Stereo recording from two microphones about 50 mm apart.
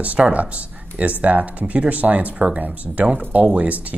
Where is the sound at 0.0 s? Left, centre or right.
Right.